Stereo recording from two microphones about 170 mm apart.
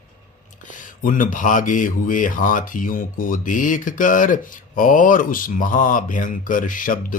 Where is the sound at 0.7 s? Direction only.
50° left (ahead or behind).